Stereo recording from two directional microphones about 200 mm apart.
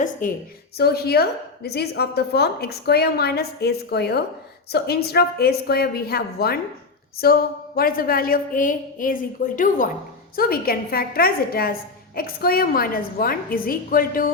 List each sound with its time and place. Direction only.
0.2 s a woman's voice: 40° left (ahead or behind)
0.8 s a woman's voice: 50° left (ahead or behind)